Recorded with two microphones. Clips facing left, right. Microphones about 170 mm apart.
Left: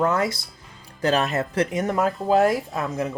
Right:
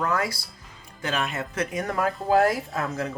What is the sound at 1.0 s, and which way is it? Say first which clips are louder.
Speech: left 7 dB; 35° left (ahead or behind).